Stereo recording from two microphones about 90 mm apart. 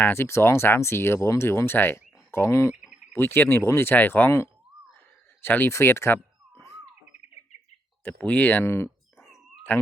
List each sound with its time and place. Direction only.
0.0 s speech: 25° left (ahead or behind)
8.0 s speech: 15° left (ahead or behind)